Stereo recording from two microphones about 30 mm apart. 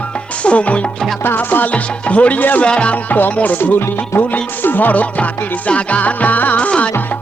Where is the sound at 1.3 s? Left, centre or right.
Left.